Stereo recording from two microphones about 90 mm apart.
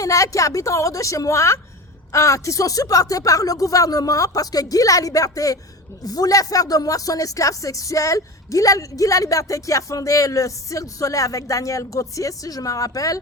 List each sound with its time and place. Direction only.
0.0 s speech: 35° left (ahead or behind)